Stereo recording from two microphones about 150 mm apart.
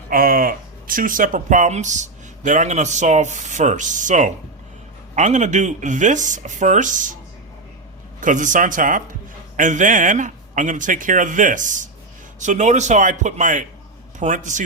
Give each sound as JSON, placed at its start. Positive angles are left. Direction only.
{"t": 0.1, "sound": "speech", "side_deg": -75}
{"t": 8.2, "sound": "a man's voice", "side_deg": -60}